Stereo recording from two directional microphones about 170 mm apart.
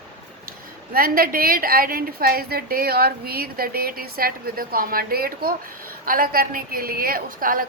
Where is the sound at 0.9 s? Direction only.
60° right (ahead or behind).